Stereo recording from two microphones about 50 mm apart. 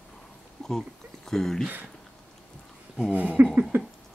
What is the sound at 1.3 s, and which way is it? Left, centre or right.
Speech, centre.